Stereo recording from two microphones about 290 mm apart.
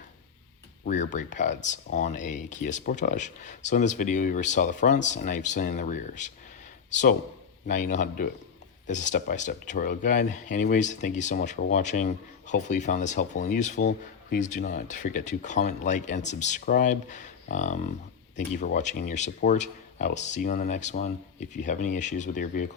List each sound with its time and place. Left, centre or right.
0.9 s speech: left